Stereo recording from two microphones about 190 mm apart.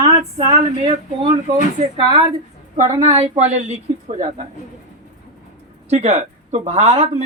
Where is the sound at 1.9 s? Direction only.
25° right (ahead or behind); by 4.4 s 40° right (ahead or behind).